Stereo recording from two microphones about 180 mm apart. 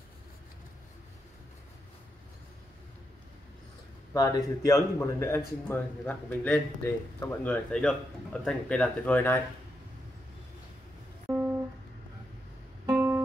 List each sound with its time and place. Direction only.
4.1 s speech: 20° left (ahead or behind)
12.8 s music: 15° right (ahead or behind)